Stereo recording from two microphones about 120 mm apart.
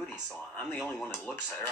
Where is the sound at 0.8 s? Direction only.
10° left (ahead or behind).